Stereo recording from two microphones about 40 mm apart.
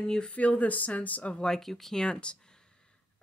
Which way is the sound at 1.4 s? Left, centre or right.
Centre.